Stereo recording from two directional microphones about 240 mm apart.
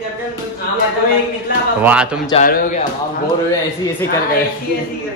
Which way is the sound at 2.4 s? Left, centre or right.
Left.